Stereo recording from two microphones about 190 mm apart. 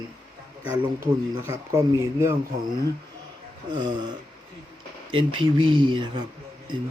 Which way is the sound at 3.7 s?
25° right (ahead or behind).